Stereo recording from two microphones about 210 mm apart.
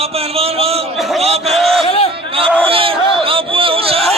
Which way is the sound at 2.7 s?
25° right (ahead or behind).